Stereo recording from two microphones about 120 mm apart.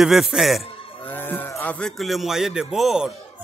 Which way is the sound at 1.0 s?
15° left (ahead or behind).